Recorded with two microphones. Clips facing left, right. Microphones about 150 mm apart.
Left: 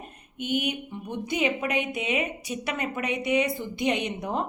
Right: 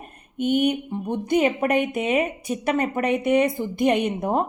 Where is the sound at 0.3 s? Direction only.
50° right (ahead or behind).